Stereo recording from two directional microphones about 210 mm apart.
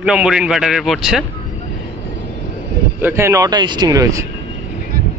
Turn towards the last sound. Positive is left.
turn(degrees=-15)  # may be behind; listen again after turning